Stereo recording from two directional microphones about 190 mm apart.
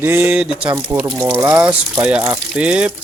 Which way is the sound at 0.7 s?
15° right (ahead or behind).